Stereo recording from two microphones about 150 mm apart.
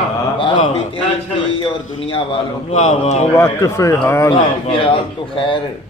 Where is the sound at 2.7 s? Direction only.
50° left (ahead or behind).